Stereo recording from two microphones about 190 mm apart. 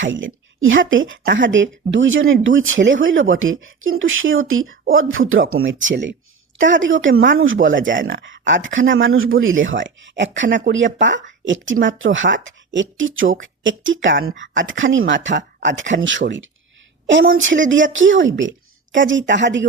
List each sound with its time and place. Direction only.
0.0 s speech: 85° right
1.3 s speech: 75° right (ahead or behind)
6.6 s speech: 80° right